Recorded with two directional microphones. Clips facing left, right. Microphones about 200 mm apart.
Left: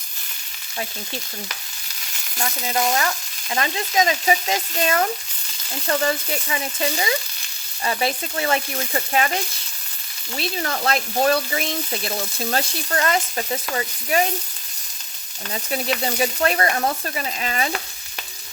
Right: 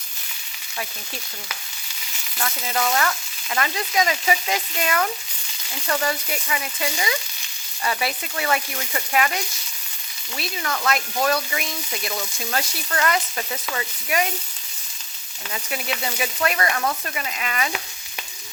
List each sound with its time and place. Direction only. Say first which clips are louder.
2.4 s frying: left 2 dB; 25° left (ahead or behind)
5.9 s speech: left 3 dB; 30° left (ahead or behind)
16.0 s speech: left 4 dB; 35° left (ahead or behind)